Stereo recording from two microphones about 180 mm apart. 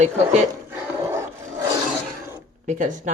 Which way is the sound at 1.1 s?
15° right (ahead or behind).